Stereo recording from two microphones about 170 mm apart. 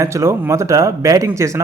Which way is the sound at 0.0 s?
15° right (ahead or behind).